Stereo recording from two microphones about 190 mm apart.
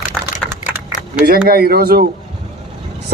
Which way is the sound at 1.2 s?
55° right (ahead or behind).